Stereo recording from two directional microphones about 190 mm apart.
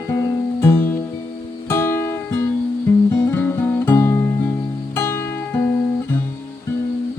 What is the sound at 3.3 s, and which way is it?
Music, 10° left (ahead or behind).